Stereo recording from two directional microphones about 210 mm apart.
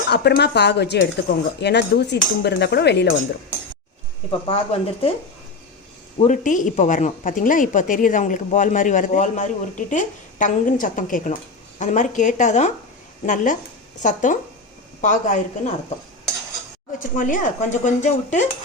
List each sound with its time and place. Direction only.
0.1 s speech: 50° left (ahead or behind)
4.3 s speech: 25° left (ahead or behind)
6.1 s speech: 35° left (ahead or behind)
17.0 s speech: 40° left (ahead or behind)